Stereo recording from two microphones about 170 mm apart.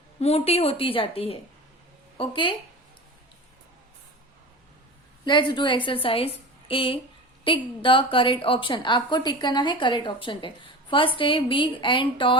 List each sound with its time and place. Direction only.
0.2 s a woman's voice: 35° left (ahead or behind)
5.2 s a woman's voice: 25° left (ahead or behind)